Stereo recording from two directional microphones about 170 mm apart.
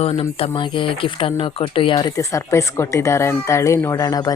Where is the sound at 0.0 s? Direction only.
35° left (ahead or behind).